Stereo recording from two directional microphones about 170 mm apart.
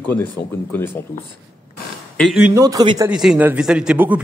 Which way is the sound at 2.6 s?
20° right (ahead or behind).